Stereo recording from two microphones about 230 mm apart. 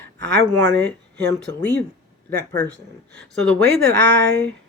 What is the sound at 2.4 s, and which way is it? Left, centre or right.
Speech, centre.